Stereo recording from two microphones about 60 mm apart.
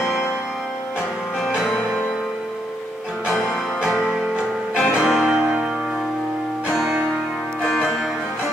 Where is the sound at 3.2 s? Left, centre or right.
Centre.